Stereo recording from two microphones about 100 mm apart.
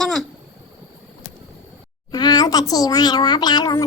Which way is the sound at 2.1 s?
45° left (ahead or behind).